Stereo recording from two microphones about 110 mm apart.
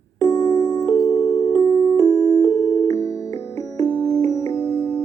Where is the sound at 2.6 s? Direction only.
30° left (ahead or behind).